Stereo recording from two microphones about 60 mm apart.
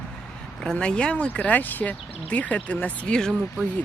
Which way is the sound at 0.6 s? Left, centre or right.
Centre.